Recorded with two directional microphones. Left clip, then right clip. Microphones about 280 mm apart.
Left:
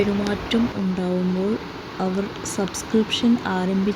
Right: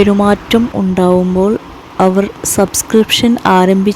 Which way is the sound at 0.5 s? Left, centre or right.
Right.